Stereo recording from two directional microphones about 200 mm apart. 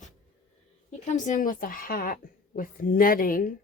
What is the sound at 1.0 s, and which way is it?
A woman's voice, 40° left (ahead or behind).